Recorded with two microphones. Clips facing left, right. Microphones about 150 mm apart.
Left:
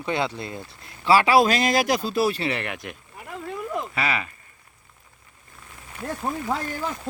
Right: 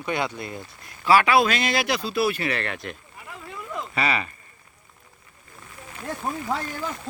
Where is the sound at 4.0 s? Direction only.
5° left (ahead or behind).